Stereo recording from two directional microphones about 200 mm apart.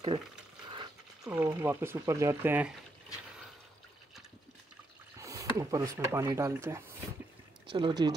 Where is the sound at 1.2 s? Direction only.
10° right (ahead or behind).